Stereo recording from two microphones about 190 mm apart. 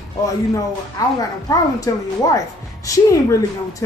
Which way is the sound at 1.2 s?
20° left (ahead or behind).